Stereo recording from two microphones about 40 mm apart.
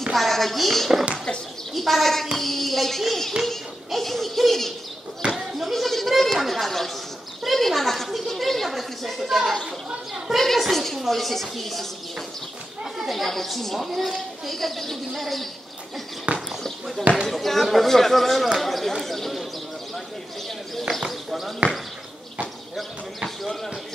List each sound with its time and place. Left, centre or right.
0.0 s a woman's voice: centre
10.1 s a woman's voice: centre
10.4 s a woman's voice: centre
16.3 s speech: right
17.3 s a woman's voice: centre
21.1 s a sound: centre
22.8 s a woman's voice: centre